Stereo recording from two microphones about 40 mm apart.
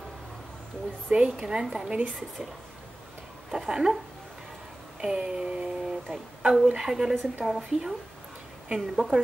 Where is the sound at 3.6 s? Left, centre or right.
Centre.